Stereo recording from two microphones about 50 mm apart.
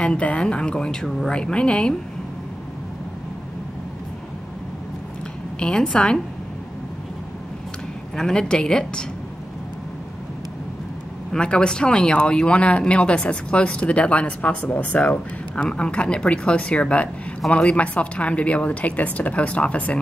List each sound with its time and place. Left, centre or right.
0.0 s speech: left
5.6 s speech: centre
8.2 s speech: centre
11.3 s speech: centre